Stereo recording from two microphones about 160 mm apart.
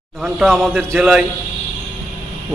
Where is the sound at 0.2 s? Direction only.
Centre (ahead or behind).